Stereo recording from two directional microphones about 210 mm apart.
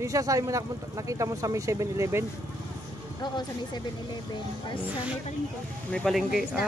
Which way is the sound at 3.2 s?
20° left (ahead or behind).